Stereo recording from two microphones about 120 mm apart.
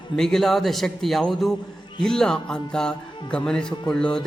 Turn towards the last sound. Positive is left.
turn(degrees=5)  # may be behind; listen again after turning